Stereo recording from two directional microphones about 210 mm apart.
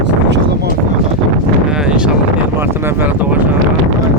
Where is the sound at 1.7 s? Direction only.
5° right (ahead or behind).